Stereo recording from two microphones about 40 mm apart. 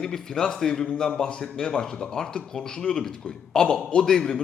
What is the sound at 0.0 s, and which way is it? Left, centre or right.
A man's voice, centre.